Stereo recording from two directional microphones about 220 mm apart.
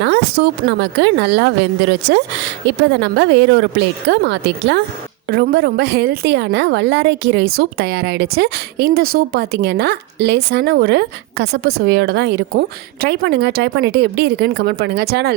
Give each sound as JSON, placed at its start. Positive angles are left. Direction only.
{"t": 0.0, "sound": "speech", "side_deg": -50}